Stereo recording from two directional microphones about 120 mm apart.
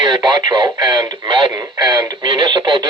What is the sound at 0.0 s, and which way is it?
Speech, 40° right (ahead or behind).